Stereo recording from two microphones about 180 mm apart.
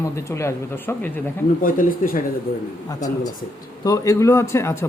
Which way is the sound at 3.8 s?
20° left (ahead or behind).